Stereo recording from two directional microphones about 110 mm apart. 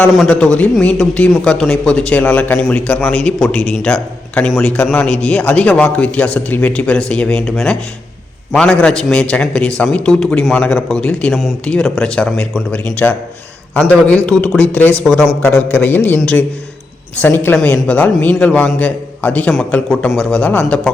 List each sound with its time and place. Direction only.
0.3 s speech: 10° left (ahead or behind)
4.9 s speech: 10° left (ahead or behind)
17.2 s a woman's voice: 20° left (ahead or behind)